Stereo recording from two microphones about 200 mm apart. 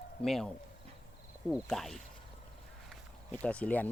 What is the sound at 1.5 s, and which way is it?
Speech, centre (ahead or behind).